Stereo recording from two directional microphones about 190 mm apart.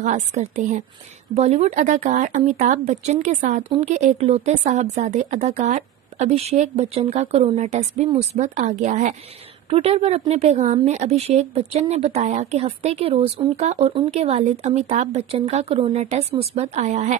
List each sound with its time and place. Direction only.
0.0 s speech: 40° right (ahead or behind)